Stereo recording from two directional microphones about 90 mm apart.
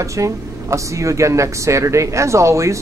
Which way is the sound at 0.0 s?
35° right (ahead or behind).